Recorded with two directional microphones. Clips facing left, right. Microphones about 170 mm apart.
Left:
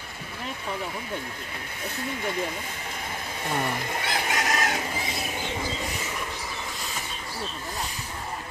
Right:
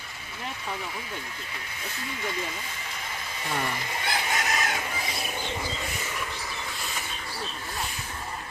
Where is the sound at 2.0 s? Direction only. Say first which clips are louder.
Left 4 dB; 50° left (ahead or behind).